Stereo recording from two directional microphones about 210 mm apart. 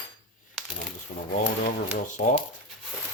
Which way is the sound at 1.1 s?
40° left (ahead or behind).